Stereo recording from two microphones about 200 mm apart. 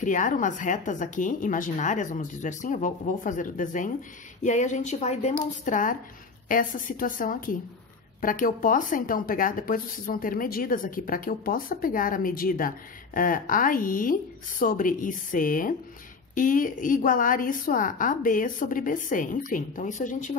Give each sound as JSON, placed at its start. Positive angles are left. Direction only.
{"t": 0.0, "sound": "a woman's voice", "side_deg": 40}